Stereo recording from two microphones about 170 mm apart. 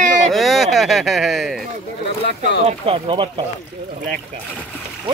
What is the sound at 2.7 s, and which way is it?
Speech, 35° right (ahead or behind).